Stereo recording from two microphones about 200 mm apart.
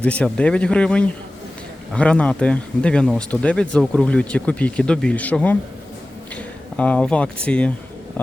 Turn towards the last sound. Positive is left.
turn(degrees=5)  # may be behind; listen again after turning